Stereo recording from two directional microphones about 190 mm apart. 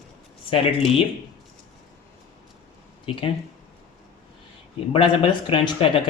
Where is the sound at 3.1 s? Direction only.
30° left (ahead or behind).